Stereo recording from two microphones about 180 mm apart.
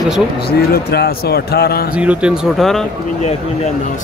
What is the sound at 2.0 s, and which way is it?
Speech, 5° right (ahead or behind).